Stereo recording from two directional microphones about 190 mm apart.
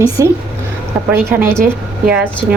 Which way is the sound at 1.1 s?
10° right (ahead or behind).